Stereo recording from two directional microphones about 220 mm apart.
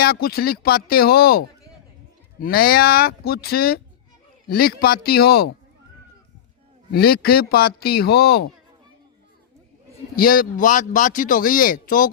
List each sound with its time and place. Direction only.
0.0 s a man's voice: 45° left (ahead or behind)
6.9 s a man's voice: 45° left (ahead or behind)
10.2 s a man's voice: 40° left (ahead or behind)